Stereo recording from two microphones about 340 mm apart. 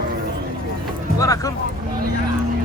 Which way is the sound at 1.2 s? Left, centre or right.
Centre.